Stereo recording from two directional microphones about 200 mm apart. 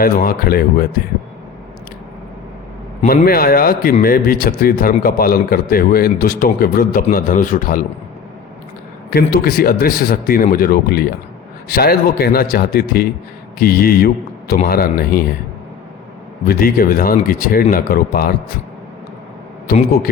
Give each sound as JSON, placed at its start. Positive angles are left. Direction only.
{"t": 0.0, "sound": "a man's voice", "side_deg": 45}
{"t": 3.1, "sound": "a man's voice", "side_deg": 50}
{"t": 9.0, "sound": "a man's voice", "side_deg": 50}
{"t": 16.5, "sound": "a man's voice", "side_deg": 45}
{"t": 19.6, "sound": "a man's voice", "side_deg": 45}